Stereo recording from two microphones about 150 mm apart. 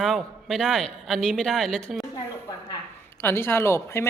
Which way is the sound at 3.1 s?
15° left (ahead or behind).